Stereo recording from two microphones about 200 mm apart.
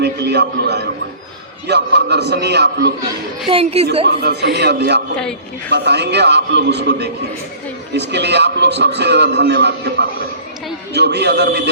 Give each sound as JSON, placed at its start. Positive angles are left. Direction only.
{"t": 0.0, "sound": "a man's voice", "side_deg": -55}
{"t": 3.4, "sound": "a woman's voice", "side_deg": -30}
{"t": 4.3, "sound": "a man's voice", "side_deg": -55}